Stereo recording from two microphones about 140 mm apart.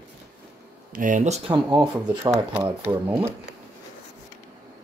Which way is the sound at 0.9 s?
70° right (ahead or behind).